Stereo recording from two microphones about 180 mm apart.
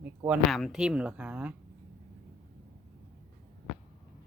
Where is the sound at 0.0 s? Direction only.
5° right (ahead or behind).